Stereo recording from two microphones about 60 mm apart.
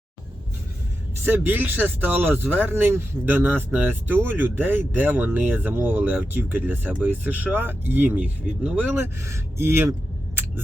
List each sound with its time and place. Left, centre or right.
1.2 s speech: right
9.2 s speech: right